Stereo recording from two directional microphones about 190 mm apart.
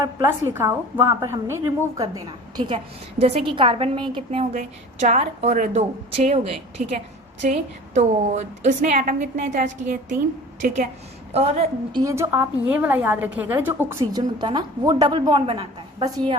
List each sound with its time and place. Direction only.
0.0 s a woman's voice: 15° right (ahead or behind)
2.6 s a woman's voice: 30° right (ahead or behind)
11.3 s a woman's voice: 35° right (ahead or behind)
11.9 s a woman's voice: 15° right (ahead or behind)